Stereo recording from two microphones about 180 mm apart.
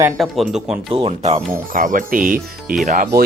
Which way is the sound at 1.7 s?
50° right (ahead or behind).